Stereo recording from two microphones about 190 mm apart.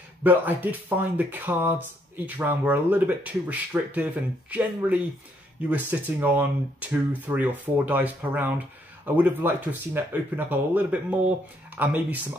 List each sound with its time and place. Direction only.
0.2 s speech: 10° right (ahead or behind)